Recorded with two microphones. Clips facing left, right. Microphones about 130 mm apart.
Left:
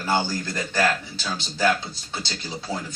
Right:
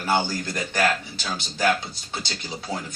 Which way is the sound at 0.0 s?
15° right (ahead or behind).